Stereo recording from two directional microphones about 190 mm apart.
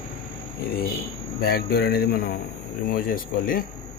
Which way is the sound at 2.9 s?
50° left (ahead or behind).